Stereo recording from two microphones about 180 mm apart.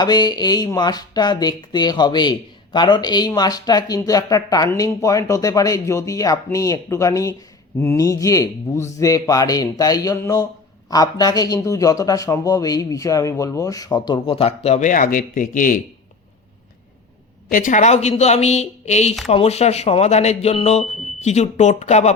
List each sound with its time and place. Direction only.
0.0 s speech: 25° left (ahead or behind); by 15.8 s 50° left (ahead or behind)
17.5 s a man's voice: 45° left (ahead or behind)